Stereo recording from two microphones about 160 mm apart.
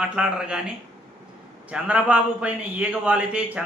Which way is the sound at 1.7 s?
10° right (ahead or behind).